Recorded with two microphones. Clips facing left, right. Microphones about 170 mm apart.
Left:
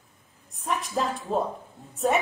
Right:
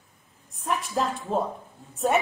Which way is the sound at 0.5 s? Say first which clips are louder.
Right 1 dB; centre (ahead or behind).